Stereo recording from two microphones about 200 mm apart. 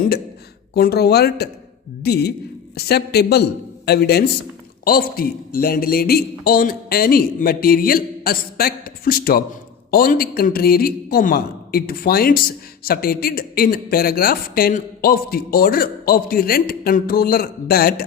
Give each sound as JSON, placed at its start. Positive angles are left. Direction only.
{"t": 0.7, "sound": "speech", "side_deg": 50}